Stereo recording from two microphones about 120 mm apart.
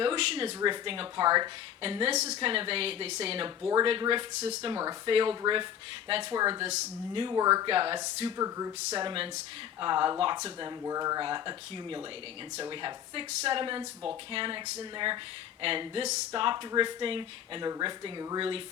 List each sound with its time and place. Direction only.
0.0 s speech: 45° right (ahead or behind)
1.8 s speech: 50° right (ahead or behind)
2.1 s a woman's voice: 65° right (ahead or behind)
2.5 s speech: 50° right (ahead or behind)
4.4 s speech: 60° right (ahead or behind)
4.7 s speech: 35° right (ahead or behind)
6.6 s a woman's voice: 65° right (ahead or behind)
7.1 s speech: 45° right (ahead or behind)
7.3 s speech: 30° right (ahead or behind)
7.7 s speech: 50° right (ahead or behind)
8.4 s speech: 30° right (ahead or behind); by 18.6 s 45° right (ahead or behind)